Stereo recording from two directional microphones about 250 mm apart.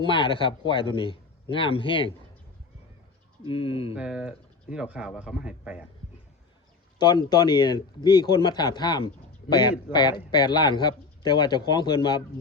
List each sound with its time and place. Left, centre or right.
0.0 s speech: centre
3.5 s speech: left
3.9 s speech: centre
7.3 s speech: centre